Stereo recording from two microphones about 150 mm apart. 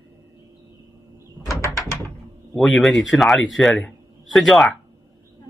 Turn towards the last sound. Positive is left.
turn(degrees=0)  # may be behind; listen again after turning